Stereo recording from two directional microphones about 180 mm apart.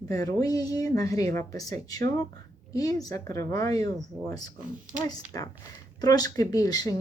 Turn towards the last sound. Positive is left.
turn(degrees=20)  # may be behind; listen again after turning